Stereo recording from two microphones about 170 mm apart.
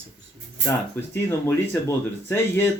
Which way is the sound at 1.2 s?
15° left (ahead or behind).